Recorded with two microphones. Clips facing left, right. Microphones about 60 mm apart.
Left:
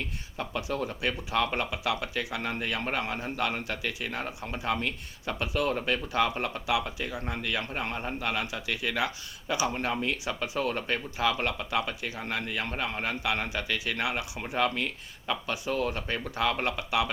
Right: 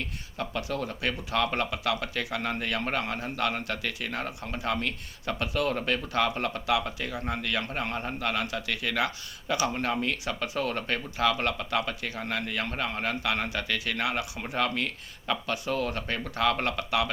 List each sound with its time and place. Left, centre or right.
0.3 s speech: centre